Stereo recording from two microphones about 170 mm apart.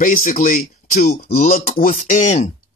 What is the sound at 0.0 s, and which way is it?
Speech, 55° left (ahead or behind).